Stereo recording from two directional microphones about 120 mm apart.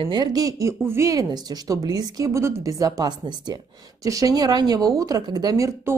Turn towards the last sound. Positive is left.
turn(degrees=-25)  # may be behind; listen again after turning